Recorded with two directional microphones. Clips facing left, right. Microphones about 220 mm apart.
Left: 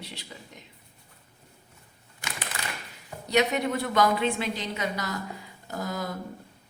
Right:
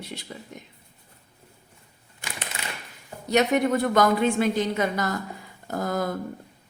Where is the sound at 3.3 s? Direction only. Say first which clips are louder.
Right 4 dB; 50° right (ahead or behind).